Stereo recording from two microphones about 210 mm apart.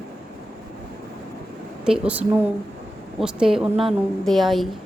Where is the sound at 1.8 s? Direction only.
5° right (ahead or behind).